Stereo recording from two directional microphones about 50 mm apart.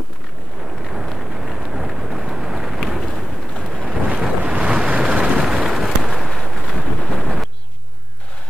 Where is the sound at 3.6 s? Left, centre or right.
Right.